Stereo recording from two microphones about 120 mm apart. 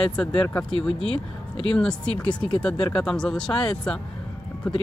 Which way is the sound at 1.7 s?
5° left (ahead or behind).